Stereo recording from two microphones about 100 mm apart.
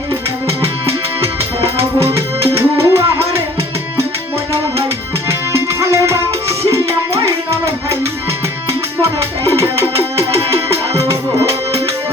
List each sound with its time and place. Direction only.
2.1 s music: 30° right (ahead or behind)
5.3 s music: 30° right (ahead or behind)
9.0 s music: 30° right (ahead or behind)